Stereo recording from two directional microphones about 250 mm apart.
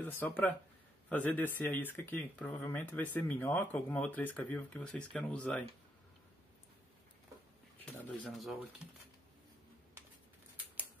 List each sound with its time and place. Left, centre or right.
0.0 s speech: centre
7.8 s speech: centre